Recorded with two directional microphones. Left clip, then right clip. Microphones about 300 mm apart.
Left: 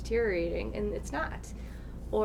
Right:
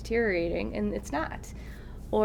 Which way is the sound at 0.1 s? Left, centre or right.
Right.